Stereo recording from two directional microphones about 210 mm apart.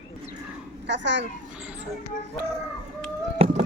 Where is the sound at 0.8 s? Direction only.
60° right (ahead or behind).